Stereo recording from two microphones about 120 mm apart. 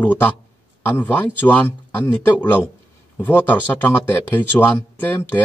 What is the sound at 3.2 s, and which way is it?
A man's voice, 15° left (ahead or behind).